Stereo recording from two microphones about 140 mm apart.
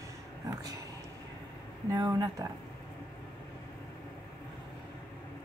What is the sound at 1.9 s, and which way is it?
Speech, 30° right (ahead or behind).